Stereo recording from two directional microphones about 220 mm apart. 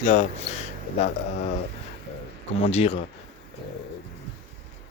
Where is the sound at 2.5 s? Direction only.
30° left (ahead or behind).